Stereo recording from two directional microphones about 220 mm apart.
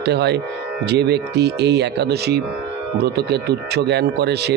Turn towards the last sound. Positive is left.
turn(degrees=-50)  # may be behind; listen again after turning